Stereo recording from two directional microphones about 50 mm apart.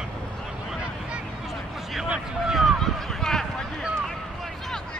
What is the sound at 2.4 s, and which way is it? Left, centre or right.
Run, centre.